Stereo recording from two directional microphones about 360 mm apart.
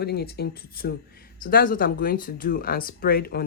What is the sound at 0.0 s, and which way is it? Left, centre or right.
Speech, left.